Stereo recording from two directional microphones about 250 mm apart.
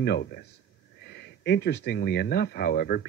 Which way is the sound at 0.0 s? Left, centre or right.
Left.